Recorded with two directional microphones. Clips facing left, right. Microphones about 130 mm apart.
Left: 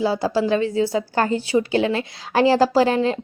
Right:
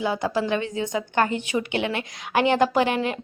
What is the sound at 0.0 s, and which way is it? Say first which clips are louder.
A woman's voice: left 4 dB; 30° left (ahead or behind).